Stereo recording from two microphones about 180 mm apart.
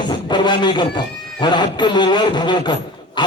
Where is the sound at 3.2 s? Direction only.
25° left (ahead or behind).